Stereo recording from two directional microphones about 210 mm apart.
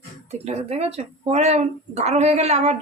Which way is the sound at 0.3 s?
30° right (ahead or behind).